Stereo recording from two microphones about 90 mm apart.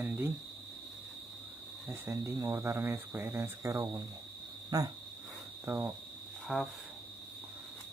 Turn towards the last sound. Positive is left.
turn(degrees=-10)  # may be behind; listen again after turning